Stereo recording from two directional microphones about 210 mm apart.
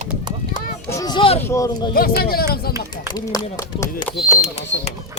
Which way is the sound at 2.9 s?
20° left (ahead or behind).